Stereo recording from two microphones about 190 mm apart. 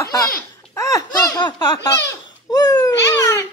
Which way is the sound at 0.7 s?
15° left (ahead or behind).